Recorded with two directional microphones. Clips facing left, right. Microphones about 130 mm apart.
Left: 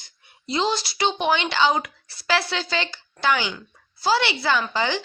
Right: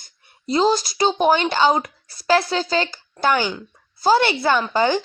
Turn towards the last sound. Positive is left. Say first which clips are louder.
# right 5 dB
turn(degrees=-45)  # may be behind; listen again after turning